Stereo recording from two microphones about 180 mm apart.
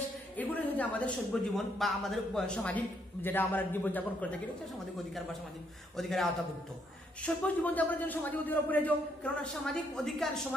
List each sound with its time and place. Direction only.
0.4 s a sound: 10° left (ahead or behind)
1.3 s a man's voice: 5° left (ahead or behind)
5.9 s a man's voice: centre (ahead or behind)
7.2 s speech: 10° left (ahead or behind)